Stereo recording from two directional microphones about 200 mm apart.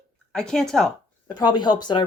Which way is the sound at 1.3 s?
20° left (ahead or behind).